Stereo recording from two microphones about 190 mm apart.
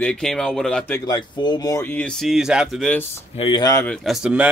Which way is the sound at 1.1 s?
20° left (ahead or behind).